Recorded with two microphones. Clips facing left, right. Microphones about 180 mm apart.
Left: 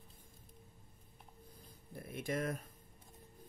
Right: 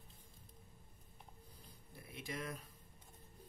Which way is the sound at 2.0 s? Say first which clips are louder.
Left 8 dB; 50° left (ahead or behind).